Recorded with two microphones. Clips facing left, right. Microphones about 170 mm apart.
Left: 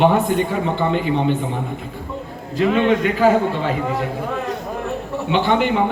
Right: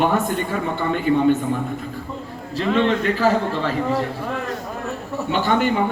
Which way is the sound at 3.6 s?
40° right (ahead or behind).